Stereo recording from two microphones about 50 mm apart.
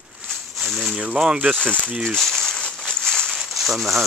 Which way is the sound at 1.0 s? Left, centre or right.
Centre.